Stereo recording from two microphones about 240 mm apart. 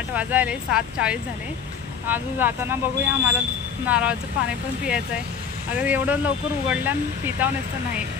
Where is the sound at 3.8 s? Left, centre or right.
Centre.